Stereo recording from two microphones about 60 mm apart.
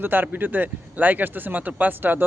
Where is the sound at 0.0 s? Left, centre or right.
Right.